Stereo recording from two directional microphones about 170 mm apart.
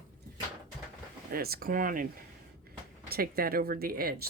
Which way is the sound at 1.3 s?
60° right (ahead or behind).